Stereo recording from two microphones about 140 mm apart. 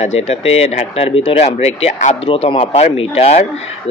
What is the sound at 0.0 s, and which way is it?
Speech, 50° left (ahead or behind).